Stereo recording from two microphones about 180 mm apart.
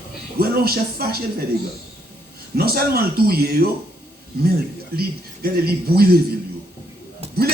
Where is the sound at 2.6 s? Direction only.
60° right (ahead or behind).